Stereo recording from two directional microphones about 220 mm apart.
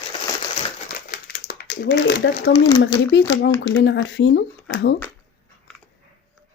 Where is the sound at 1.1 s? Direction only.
45° left (ahead or behind).